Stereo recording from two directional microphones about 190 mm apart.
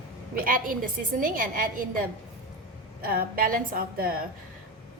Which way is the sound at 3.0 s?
50° right (ahead or behind).